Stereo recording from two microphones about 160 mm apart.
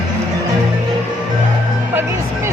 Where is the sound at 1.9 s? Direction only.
15° right (ahead or behind).